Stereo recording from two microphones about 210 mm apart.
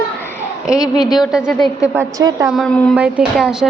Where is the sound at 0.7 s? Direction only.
20° left (ahead or behind).